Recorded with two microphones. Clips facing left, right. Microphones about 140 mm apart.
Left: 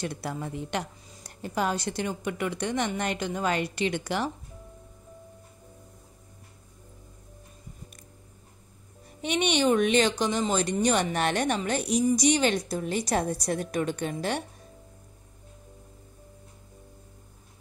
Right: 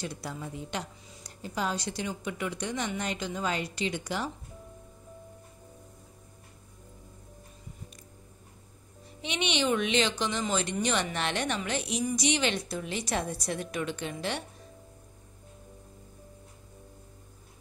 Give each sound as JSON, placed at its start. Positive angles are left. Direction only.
{"t": 0.0, "sound": "a woman's voice", "side_deg": 60}
{"t": 9.2, "sound": "speech", "side_deg": 45}